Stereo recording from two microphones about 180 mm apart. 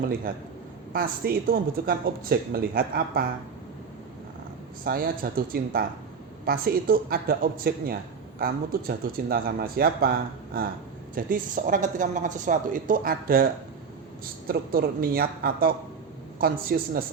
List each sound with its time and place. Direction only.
0.9 s a woman's voice: 55° right (ahead or behind)
4.9 s a woman's voice: 55° right (ahead or behind)
11.1 s a woman's voice: 50° right (ahead or behind)